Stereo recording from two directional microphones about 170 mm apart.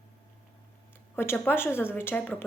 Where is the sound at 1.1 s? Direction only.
15° left (ahead or behind).